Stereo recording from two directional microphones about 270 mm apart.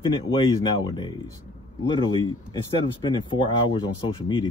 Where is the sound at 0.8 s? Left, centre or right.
Centre.